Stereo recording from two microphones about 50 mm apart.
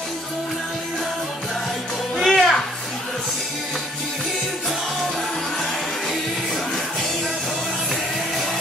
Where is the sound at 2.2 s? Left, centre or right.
Centre.